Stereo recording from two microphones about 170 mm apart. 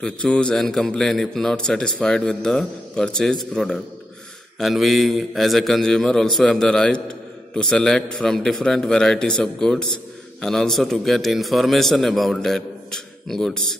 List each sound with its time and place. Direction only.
0.0 s a man's voice: 5° left (ahead or behind)